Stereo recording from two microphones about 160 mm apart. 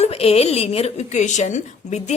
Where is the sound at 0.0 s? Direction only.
40° left (ahead or behind).